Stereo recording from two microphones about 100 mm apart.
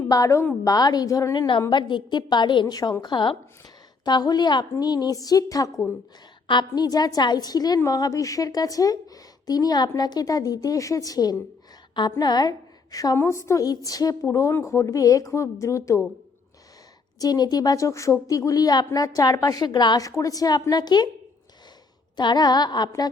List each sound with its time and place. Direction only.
0.1 s a woman's voice: 35° left (ahead or behind)
13.1 s a woman's voice: 30° left (ahead or behind)
17.2 s a woman's voice: 40° left (ahead or behind)
22.1 s a woman's voice: 45° left (ahead or behind)